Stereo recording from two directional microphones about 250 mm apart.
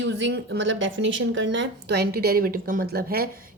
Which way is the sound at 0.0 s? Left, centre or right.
Right.